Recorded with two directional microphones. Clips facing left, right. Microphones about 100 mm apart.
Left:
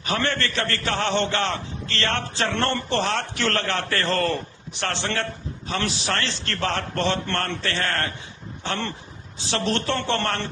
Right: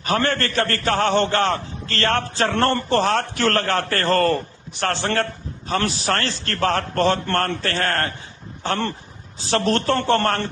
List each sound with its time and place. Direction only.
0.0 s a man's voice: 40° right (ahead or behind)